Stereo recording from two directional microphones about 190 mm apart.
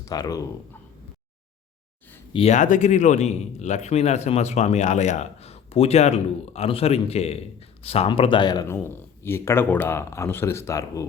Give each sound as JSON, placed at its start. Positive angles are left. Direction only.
{"t": 0.0, "sound": "speech", "side_deg": 20}
{"t": 2.3, "sound": "a man's voice", "side_deg": 35}